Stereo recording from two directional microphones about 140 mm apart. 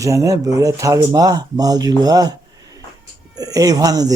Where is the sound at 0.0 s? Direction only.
25° right (ahead or behind).